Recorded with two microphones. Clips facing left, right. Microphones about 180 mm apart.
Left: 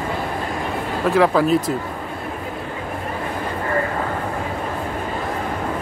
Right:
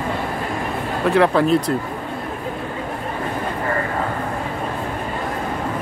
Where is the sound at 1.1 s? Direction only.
Centre (ahead or behind).